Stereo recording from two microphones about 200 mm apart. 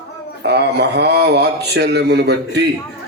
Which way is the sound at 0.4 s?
55° right (ahead or behind).